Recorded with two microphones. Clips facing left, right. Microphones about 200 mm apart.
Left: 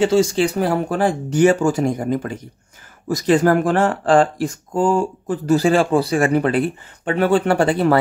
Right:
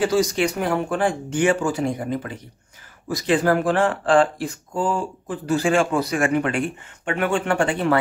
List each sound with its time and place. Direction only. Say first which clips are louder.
0.0 s speech: left 4 dB; 25° left (ahead or behind)